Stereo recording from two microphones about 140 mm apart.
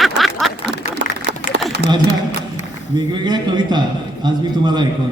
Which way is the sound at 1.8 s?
45° right (ahead or behind).